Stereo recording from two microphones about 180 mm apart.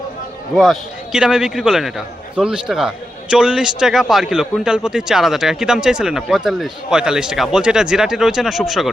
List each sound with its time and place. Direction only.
0.5 s a man's voice: centre (ahead or behind)